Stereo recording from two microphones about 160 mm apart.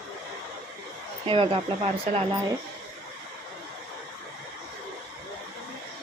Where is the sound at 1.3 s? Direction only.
35° right (ahead or behind).